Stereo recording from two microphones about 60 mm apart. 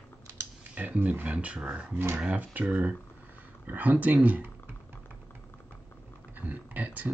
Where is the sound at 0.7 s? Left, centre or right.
Right.